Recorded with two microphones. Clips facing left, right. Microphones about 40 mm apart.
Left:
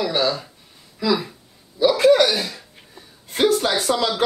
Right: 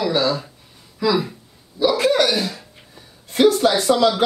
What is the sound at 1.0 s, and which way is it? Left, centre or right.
Speech, centre.